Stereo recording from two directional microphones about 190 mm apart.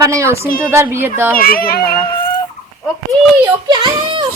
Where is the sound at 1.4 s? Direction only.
50° left (ahead or behind).